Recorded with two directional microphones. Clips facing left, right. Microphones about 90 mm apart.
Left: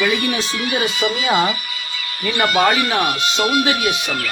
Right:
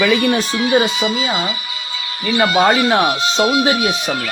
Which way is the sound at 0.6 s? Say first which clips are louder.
Right 4 dB; 20° right (ahead or behind).